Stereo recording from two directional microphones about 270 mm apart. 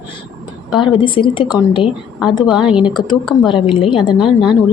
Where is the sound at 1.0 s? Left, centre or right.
Centre.